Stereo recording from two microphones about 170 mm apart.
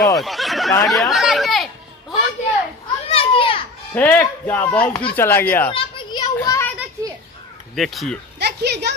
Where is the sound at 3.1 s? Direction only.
35° left (ahead or behind).